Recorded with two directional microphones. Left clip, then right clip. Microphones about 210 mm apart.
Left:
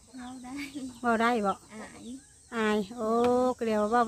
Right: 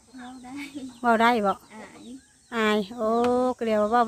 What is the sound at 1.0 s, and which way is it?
Speech, 15° right (ahead or behind).